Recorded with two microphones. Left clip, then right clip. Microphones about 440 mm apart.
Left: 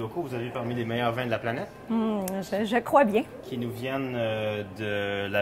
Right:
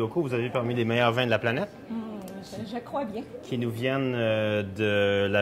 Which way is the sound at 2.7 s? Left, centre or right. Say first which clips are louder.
Left 11 dB; left.